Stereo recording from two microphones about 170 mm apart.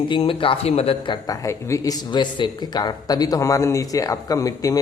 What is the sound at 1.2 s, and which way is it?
Speech, 20° left (ahead or behind).